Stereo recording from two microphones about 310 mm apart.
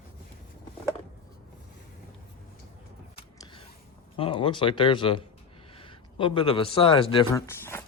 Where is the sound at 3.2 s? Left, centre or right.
Centre.